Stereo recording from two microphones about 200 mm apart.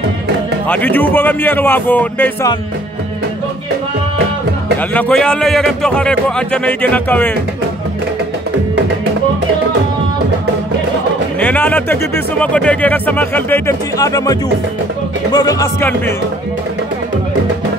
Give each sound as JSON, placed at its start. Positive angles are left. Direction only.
{"t": 0.7, "sound": "speech", "side_deg": 10}
{"t": 4.9, "sound": "speech", "side_deg": 5}
{"t": 11.3, "sound": "speech", "side_deg": 5}